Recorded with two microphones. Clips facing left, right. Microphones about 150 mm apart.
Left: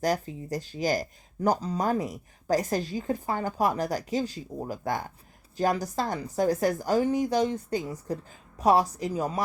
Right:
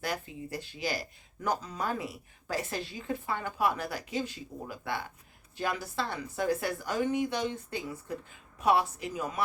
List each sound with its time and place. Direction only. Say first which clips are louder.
0.0 s speech: left 8 dB; 40° left (ahead or behind)